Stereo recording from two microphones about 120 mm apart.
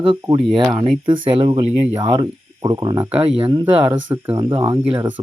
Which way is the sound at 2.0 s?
30° right (ahead or behind).